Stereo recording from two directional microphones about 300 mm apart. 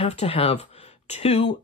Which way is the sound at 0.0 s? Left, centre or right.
Centre.